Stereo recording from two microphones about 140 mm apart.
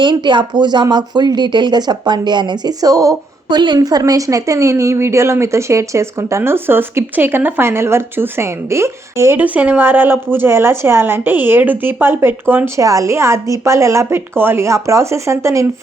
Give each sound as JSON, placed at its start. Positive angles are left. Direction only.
{"t": 0.0, "sound": "a woman's voice", "side_deg": -35}